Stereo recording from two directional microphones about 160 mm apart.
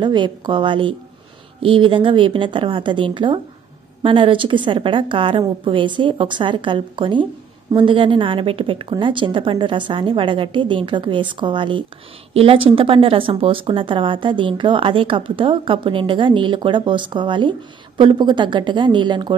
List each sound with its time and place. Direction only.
0.0 s speech: 30° right (ahead or behind)